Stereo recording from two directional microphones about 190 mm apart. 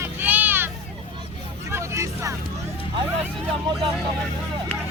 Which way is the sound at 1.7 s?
15° right (ahead or behind).